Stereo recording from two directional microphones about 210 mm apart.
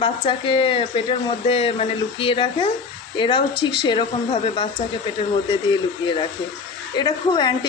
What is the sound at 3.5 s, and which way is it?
Speech, 55° left (ahead or behind).